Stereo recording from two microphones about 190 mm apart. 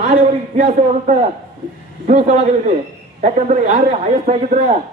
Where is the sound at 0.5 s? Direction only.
40° right (ahead or behind).